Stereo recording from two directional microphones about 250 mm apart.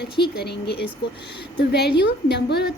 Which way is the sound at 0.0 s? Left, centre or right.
Left.